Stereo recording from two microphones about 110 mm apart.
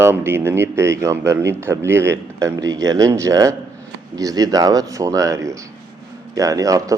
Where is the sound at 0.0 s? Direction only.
20° right (ahead or behind).